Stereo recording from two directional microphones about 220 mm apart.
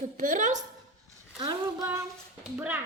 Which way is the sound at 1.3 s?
15° right (ahead or behind).